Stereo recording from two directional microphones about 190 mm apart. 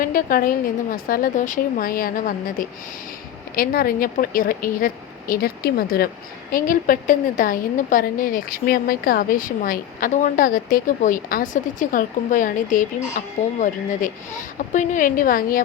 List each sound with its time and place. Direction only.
0.0 s a woman's voice: 50° left (ahead or behind)